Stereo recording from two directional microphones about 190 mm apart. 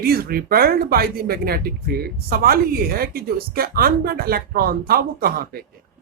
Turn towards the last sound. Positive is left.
turn(degrees=-55)  # may be behind; listen again after turning